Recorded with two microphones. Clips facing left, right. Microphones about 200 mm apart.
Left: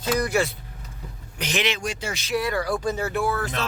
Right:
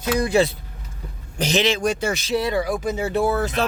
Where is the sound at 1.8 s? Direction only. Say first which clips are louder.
Right 8 dB; 50° right (ahead or behind).